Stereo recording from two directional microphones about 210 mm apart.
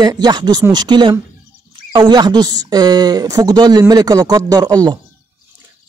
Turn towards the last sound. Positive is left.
turn(degrees=-20)  # may be behind; listen again after turning